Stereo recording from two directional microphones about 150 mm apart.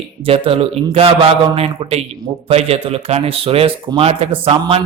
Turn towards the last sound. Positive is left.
turn(degrees=-35)  # may be behind; listen again after turning